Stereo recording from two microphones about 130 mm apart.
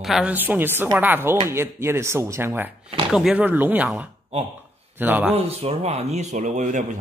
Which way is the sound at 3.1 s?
5° right (ahead or behind).